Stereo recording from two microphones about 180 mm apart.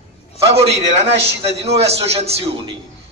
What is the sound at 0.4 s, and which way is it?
A man's voice, 35° right (ahead or behind).